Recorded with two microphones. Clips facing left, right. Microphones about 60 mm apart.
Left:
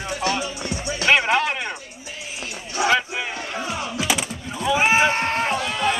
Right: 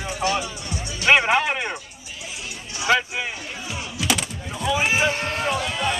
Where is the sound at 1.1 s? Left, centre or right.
Centre.